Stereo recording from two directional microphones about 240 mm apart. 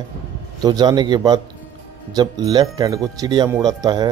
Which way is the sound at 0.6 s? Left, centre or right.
Centre.